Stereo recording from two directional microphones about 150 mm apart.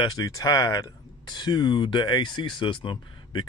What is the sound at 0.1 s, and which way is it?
Speech, 25° left (ahead or behind).